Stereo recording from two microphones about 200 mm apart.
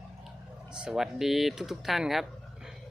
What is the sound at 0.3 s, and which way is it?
Speech, 5° right (ahead or behind).